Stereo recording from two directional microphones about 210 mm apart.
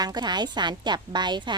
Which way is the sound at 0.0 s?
20° right (ahead or behind).